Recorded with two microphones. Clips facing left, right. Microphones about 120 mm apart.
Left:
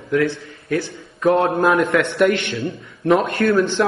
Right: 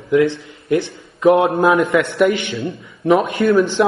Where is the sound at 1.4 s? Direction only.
Centre (ahead or behind).